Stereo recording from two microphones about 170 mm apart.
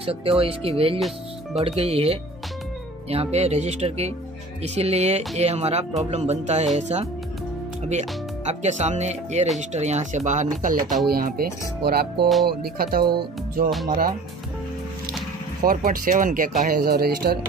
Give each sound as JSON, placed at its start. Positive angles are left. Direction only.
{"t": 0.0, "sound": "speech", "side_deg": -35}
{"t": 0.9, "sound": "speech", "side_deg": 0}
{"t": 1.6, "sound": "speech", "side_deg": -35}
{"t": 11.1, "sound": "speech", "side_deg": -60}
{"t": 13.0, "sound": "speech", "side_deg": -25}
{"t": 13.8, "sound": "speech", "side_deg": -55}
{"t": 15.6, "sound": "speech", "side_deg": -55}